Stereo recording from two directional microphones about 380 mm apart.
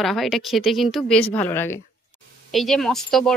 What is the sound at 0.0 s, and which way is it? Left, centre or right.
A woman's voice, centre.